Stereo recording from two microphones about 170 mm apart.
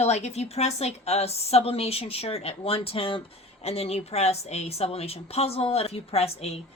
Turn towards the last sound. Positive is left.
turn(degrees=35)  # may be behind; listen again after turning